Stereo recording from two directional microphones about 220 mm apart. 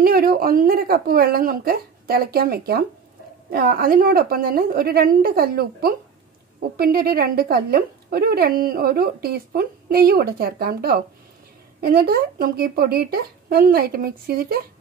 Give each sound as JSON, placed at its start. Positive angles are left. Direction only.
{"t": 0.0, "sound": "a woman's voice", "side_deg": -45}